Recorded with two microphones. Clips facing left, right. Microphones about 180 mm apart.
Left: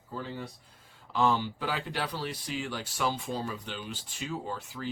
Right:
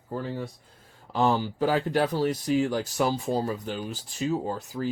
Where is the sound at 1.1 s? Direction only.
40° right (ahead or behind).